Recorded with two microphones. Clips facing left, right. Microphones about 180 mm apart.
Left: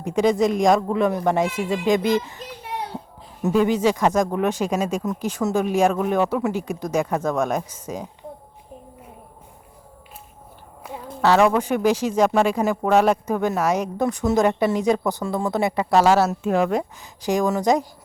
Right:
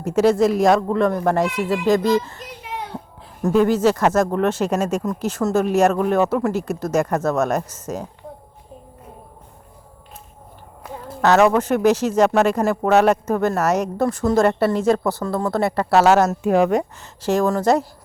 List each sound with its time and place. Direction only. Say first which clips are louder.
0.0 s speech: right 3 dB; 5° right (ahead or behind)
2.0 s speech: right 2 dB; 15° left (ahead or behind)
3.4 s speech: right 2 dB; centre (ahead or behind)
3.8 s speech: right 2 dB; 10° left (ahead or behind)
10.8 s a sound: right 1 dB; centre (ahead or behind)
11.5 s speech: right 3 dB; 10° left (ahead or behind)
13.1 s speech: right 2 dB; 10° left (ahead or behind)
15.5 s speech: right 2 dB; centre (ahead or behind)
17.4 s speech: right 2 dB; 10° left (ahead or behind)